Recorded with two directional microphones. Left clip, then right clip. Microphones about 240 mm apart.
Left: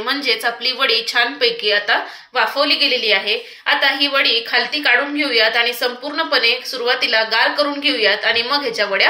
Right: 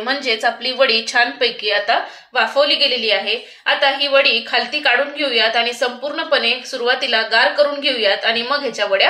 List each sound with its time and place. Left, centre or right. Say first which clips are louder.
0.1 s a woman's voice: right 1 dB; right